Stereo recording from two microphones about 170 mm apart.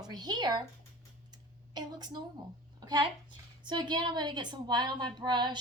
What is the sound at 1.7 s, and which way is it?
Speech, 25° right (ahead or behind).